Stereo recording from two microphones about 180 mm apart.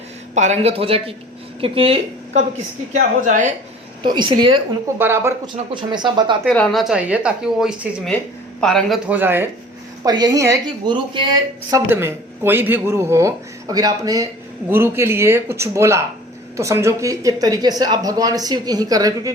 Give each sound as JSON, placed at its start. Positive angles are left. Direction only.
{"t": 0.3, "sound": "a woman's voice", "side_deg": -40}
{"t": 2.9, "sound": "a woman's voice", "side_deg": -45}
{"t": 4.0, "sound": "speech", "side_deg": -25}
{"t": 4.9, "sound": "speech", "side_deg": -15}
{"t": 5.7, "sound": "speech", "side_deg": -25}
{"t": 6.4, "sound": "speech", "side_deg": 5}
{"t": 9.0, "sound": "speech", "side_deg": -10}
{"t": 11.7, "sound": "speech", "side_deg": -15}